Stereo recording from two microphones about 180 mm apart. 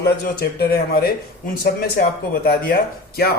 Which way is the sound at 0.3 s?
60° left (ahead or behind).